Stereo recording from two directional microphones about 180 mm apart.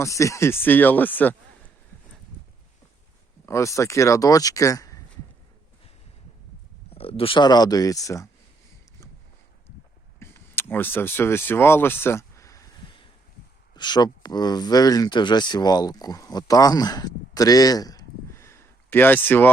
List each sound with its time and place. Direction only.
0.0 s a man's voice: 15° left (ahead or behind)
3.4 s a man's voice: 15° left (ahead or behind)
6.9 s speech: 30° left (ahead or behind)
10.2 s speech: 15° left (ahead or behind)
13.7 s speech: 25° left (ahead or behind)